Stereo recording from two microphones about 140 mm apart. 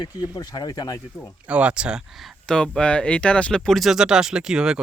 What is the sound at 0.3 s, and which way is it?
Speech, 30° left (ahead or behind).